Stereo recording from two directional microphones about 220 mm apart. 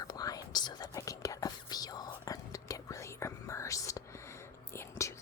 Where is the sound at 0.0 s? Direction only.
15° left (ahead or behind).